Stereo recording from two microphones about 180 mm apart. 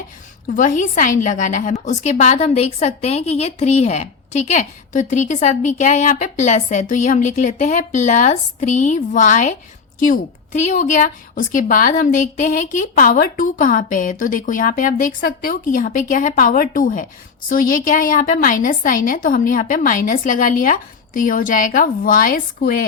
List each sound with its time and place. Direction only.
0.4 s a woman's voice: 45° left (ahead or behind)